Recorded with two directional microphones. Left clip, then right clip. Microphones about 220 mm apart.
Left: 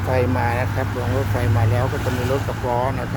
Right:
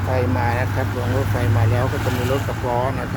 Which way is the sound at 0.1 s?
15° left (ahead or behind).